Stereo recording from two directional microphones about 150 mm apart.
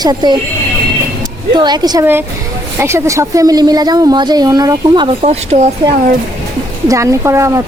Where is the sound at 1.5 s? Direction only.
30° right (ahead or behind).